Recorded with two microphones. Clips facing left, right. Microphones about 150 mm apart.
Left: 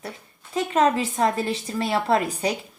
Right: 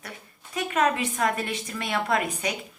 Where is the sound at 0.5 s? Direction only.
25° left (ahead or behind).